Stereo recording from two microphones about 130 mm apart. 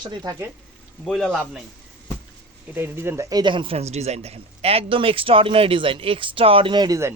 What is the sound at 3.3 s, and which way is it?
Speech, 35° right (ahead or behind).